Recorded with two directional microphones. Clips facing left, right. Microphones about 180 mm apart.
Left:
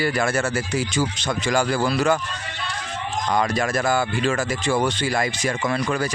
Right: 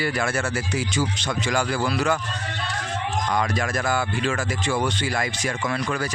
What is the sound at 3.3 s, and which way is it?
Speech, 35° left (ahead or behind).